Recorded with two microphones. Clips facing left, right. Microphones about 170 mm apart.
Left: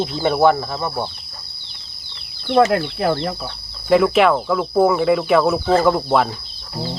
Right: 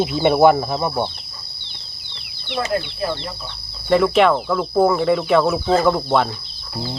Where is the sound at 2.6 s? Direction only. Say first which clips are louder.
Left 3 dB; 70° left (ahead or behind).